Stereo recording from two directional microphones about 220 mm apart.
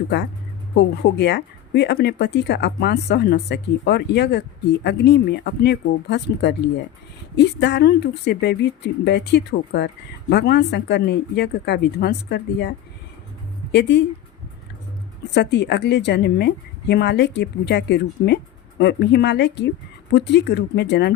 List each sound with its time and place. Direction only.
1.1 s speech: 50° left (ahead or behind)
15.3 s speech: 50° left (ahead or behind)